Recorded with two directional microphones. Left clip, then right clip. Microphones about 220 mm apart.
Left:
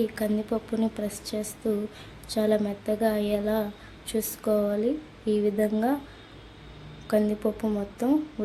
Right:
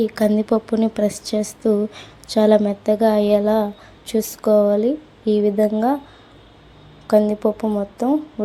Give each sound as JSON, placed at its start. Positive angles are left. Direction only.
{"t": 0.0, "sound": "a woman's voice", "side_deg": -30}
{"t": 7.1, "sound": "a woman's voice", "side_deg": -20}